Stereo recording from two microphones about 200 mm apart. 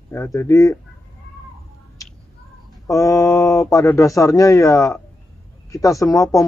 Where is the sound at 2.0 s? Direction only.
15° left (ahead or behind).